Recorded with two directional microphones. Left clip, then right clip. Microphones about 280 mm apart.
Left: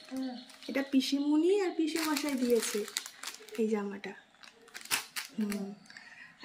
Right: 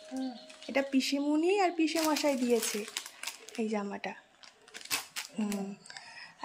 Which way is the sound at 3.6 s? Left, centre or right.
Centre.